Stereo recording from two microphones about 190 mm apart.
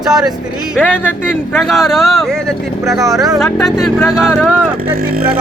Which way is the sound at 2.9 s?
15° right (ahead or behind).